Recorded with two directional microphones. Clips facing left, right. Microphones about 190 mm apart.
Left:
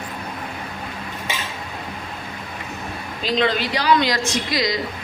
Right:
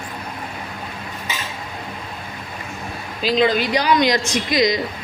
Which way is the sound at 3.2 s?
10° right (ahead or behind).